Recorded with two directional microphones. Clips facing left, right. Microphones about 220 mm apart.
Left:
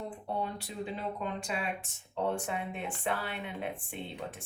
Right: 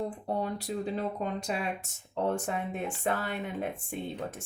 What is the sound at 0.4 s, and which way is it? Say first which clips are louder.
Speech: right 5 dB; 40° right (ahead or behind).